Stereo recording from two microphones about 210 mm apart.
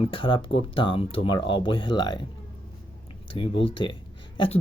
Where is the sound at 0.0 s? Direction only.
25° left (ahead or behind).